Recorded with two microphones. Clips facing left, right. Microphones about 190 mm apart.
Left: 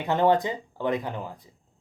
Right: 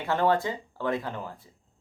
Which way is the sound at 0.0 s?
20° left (ahead or behind).